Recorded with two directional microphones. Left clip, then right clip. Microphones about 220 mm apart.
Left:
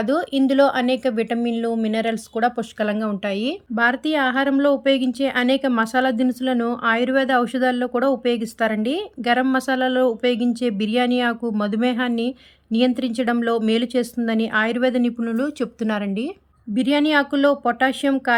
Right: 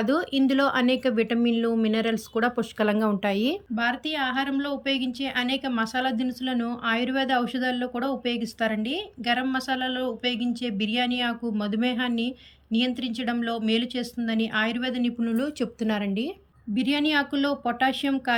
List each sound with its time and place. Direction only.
0.0 s speech: 10° left (ahead or behind)
3.8 s speech: 15° left (ahead or behind)